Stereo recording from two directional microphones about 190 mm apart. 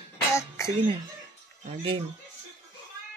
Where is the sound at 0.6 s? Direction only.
15° left (ahead or behind).